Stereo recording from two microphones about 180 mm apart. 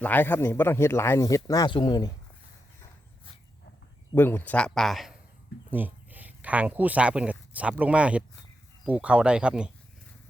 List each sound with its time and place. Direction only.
0.0 s speech: 10° left (ahead or behind)
4.1 s speech: 10° left (ahead or behind); by 9.7 s 5° right (ahead or behind)